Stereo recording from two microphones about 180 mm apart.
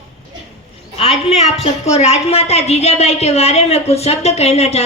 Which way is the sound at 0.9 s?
35° left (ahead or behind).